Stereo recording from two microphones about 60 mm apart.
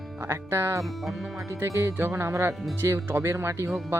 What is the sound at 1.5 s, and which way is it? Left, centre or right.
Speech, right.